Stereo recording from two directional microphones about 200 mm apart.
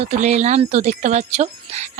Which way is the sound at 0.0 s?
35° right (ahead or behind).